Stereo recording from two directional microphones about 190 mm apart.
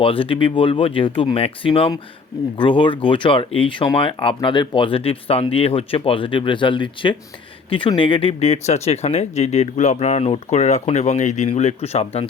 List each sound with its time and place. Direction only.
0.0 s speech: 30° left (ahead or behind)